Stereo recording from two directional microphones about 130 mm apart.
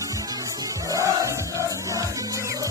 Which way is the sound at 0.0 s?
25° right (ahead or behind).